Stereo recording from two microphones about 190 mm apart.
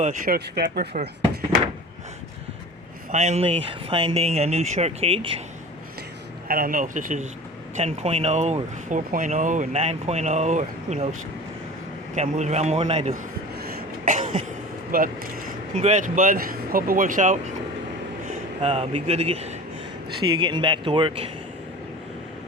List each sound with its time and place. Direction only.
0.0 s speech: 40° right (ahead or behind)
0.3 s speech: 55° right (ahead or behind)
3.1 s speech: 40° right (ahead or behind)
6.5 s speech: 50° right (ahead or behind)
12.1 s speech: 40° right (ahead or behind)
13.6 s throat clearing: 45° right (ahead or behind)
14.9 s speech: 50° right (ahead or behind)
15.7 s a man's voice: 40° right (ahead or behind)